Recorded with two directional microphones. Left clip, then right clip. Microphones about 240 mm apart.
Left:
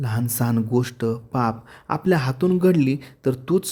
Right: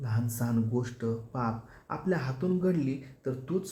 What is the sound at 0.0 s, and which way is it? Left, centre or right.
Speech, left.